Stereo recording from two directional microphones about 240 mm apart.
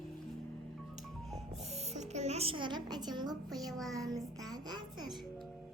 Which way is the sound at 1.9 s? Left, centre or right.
Right.